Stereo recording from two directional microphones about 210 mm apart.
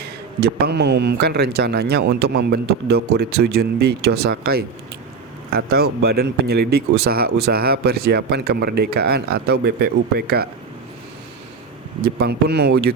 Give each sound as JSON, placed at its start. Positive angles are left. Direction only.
{"t": 0.0, "sound": "speech", "side_deg": -50}
{"t": 12.0, "sound": "speech", "side_deg": -50}